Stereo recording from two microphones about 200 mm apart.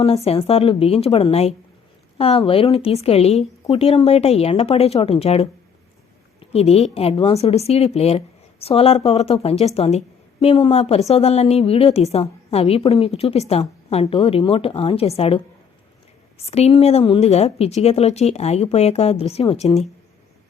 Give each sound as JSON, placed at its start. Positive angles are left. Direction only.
{"t": 0.0, "sound": "a woman's voice", "side_deg": 30}
{"t": 16.5, "sound": "speech", "side_deg": 30}